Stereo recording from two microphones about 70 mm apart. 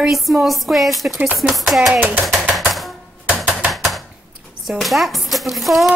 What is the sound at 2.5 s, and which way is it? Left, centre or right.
Typewriter, centre.